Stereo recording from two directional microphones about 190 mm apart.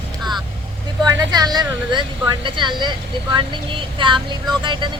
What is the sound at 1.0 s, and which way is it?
A woman's voice, 20° right (ahead or behind).